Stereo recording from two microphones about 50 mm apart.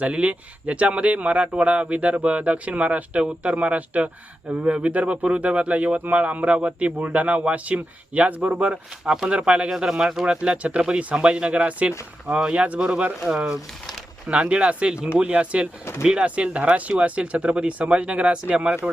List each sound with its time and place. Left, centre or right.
0.0 s speech: right
9.0 s speech: centre
10.2 s speech: right
14.3 s speech: right